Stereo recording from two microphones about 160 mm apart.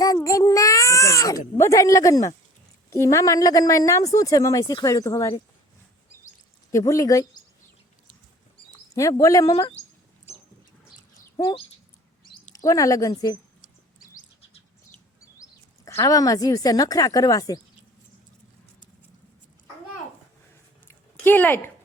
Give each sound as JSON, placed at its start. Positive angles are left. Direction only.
{"t": 0.2, "sound": "baby cry", "side_deg": 20}
{"t": 1.5, "sound": "a woman's voice", "side_deg": 20}
{"t": 6.7, "sound": "a woman's voice", "side_deg": 20}
{"t": 9.0, "sound": "a woman's voice", "side_deg": 20}
{"t": 11.3, "sound": "a woman's voice", "side_deg": 30}
{"t": 15.4, "sound": "speech", "side_deg": 20}
{"t": 20.8, "sound": "a sound", "side_deg": 10}